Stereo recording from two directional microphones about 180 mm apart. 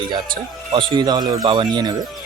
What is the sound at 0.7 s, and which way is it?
Speech, 25° right (ahead or behind).